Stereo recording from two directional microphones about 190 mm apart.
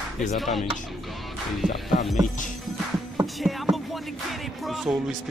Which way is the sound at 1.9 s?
40° left (ahead or behind).